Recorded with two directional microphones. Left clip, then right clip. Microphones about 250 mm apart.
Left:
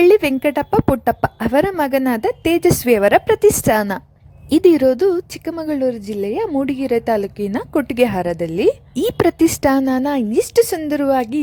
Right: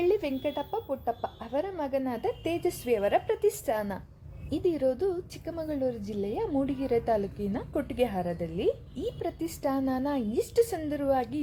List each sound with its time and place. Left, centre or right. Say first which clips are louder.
0.0 s a woman's voice: left 15 dB; left